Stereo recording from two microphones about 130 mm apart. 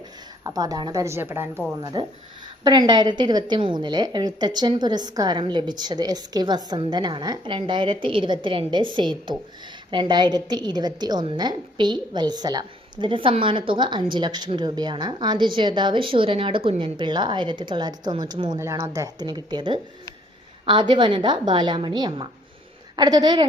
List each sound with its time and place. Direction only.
0.4 s a woman's voice: 25° right (ahead or behind)
1.0 s a woman's voice: 20° right (ahead or behind)
1.8 s a woman's voice: 30° right (ahead or behind)